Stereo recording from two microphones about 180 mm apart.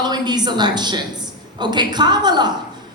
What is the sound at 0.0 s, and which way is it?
A woman's voice, 25° right (ahead or behind).